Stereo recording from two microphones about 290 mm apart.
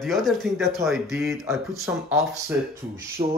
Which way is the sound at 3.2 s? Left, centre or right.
Centre.